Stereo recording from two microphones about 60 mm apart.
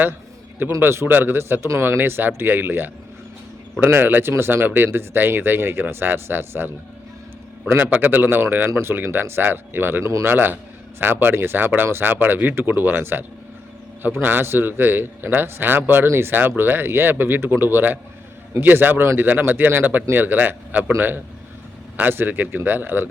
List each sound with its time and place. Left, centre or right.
0.8 s speech: right
7.9 s speech: right
10.0 s speech: right
10.2 s speech: right
21.9 s speech: right